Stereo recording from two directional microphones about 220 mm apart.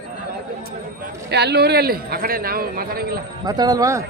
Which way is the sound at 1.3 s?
50° right (ahead or behind).